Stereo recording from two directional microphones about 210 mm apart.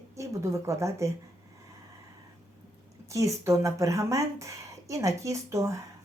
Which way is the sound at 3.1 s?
15° right (ahead or behind).